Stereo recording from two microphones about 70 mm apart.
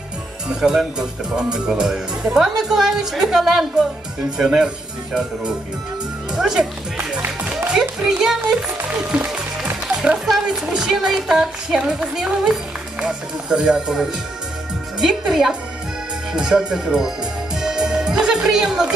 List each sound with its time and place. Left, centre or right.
0.4 s speech: centre
9.0 s music: centre
10.2 s a woman's voice: centre
17.5 s music: centre